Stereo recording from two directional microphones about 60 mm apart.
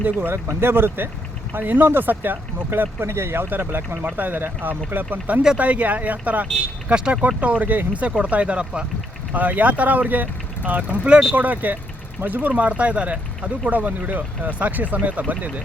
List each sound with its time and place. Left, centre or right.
0.0 s speech: right